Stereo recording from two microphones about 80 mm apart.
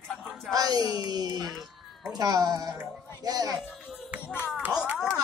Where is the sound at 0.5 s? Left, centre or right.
Right.